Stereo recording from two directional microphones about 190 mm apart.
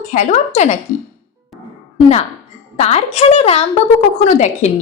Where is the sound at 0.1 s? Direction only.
40° left (ahead or behind).